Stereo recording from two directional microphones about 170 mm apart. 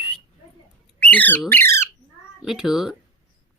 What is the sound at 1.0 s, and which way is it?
Squawk, 10° left (ahead or behind).